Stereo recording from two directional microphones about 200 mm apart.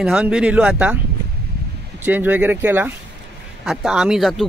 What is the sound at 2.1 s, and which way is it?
Speech, 10° right (ahead or behind).